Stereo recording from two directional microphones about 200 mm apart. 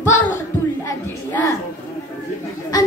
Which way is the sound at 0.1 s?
10° left (ahead or behind).